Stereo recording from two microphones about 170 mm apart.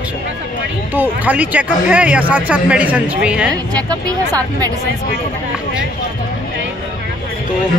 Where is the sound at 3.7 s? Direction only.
25° right (ahead or behind).